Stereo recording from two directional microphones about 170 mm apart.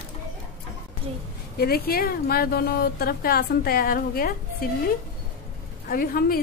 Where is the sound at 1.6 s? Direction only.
60° left (ahead or behind).